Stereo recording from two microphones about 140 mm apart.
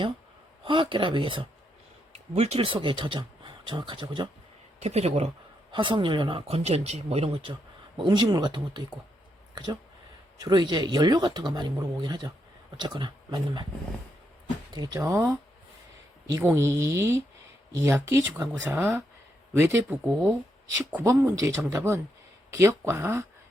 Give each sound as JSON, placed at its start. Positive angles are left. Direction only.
{"t": 0.6, "sound": "speech", "side_deg": -35}
{"t": 2.1, "sound": "speech", "side_deg": -50}
{"t": 4.8, "sound": "speech", "side_deg": -50}
{"t": 5.7, "sound": "speech", "side_deg": -35}
{"t": 8.0, "sound": "speech", "side_deg": -30}
{"t": 10.4, "sound": "speech", "side_deg": -30}
{"t": 14.7, "sound": "speech", "side_deg": -30}
{"t": 16.3, "sound": "speech", "side_deg": -20}